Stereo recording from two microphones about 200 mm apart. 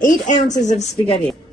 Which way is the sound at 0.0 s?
40° left (ahead or behind).